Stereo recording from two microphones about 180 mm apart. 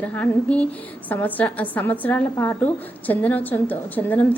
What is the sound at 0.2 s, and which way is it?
A woman's voice, 10° left (ahead or behind).